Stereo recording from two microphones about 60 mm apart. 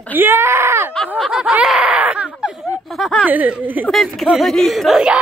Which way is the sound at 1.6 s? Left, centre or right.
Centre.